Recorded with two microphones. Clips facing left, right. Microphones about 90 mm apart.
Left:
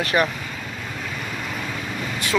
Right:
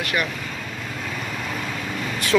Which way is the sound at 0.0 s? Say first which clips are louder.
Left 4 dB; 35° left (ahead or behind).